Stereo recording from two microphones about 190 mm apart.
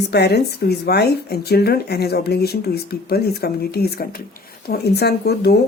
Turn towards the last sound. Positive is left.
turn(degrees=55)  # may be behind; listen again after turning